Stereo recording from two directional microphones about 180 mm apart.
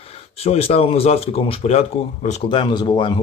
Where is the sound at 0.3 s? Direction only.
35° left (ahead or behind).